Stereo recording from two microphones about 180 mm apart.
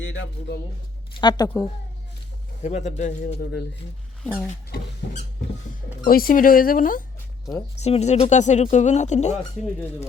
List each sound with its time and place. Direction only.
0.0 s speech: 90° left
1.1 s speech: 25° left (ahead or behind)
2.6 s speech: 40° left (ahead or behind)
4.2 s speech: 5° left (ahead or behind)
6.1 s speech: 55° left (ahead or behind)
7.8 s speech: 35° left (ahead or behind)